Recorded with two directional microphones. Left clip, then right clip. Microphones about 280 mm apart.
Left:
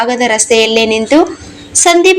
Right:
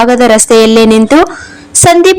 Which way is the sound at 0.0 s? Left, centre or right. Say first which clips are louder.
Right 6 dB; right.